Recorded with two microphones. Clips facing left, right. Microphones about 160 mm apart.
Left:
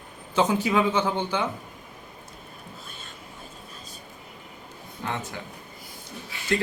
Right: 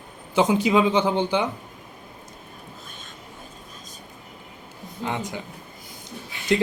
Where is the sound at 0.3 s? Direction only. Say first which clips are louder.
Right 3 dB; 15° right (ahead or behind).